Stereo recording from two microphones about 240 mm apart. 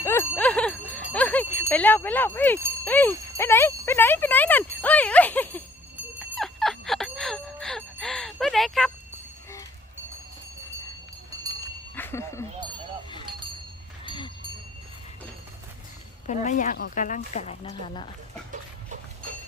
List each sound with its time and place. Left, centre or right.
0.0 s bicycle bell: centre
1.7 s speech: centre
6.1 s music: centre
11.9 s a sound: centre
14.0 s a sound: centre
16.2 s speech: left